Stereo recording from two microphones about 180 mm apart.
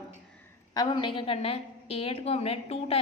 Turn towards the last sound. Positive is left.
turn(degrees=35)  # may be behind; listen again after turning